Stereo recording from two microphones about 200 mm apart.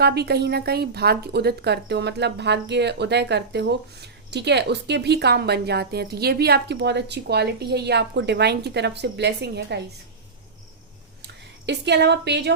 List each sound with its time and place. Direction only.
0.0 s a woman's voice: 55° right (ahead or behind)
11.2 s speech: 60° right (ahead or behind)